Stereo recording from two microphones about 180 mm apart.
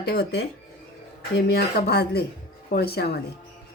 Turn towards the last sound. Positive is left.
turn(degrees=60)  # may be behind; listen again after turning